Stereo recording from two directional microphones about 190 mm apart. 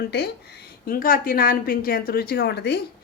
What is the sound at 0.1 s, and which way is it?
Speech, 60° left (ahead or behind).